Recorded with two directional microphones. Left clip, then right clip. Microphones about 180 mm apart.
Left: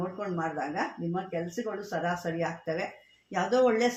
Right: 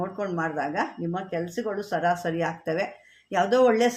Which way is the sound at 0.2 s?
30° right (ahead or behind).